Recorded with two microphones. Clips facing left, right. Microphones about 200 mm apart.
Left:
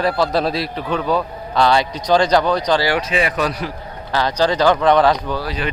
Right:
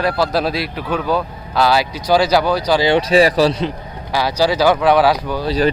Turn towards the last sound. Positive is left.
turn(degrees=-35)  # may be behind; listen again after turning